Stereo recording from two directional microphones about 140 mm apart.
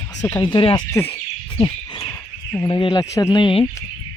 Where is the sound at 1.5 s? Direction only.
35° left (ahead or behind).